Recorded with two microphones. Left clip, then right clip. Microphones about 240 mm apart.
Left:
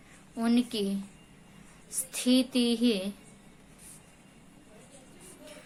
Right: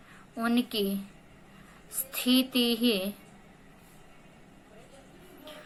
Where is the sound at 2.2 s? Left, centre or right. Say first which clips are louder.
Right 1 dB; centre.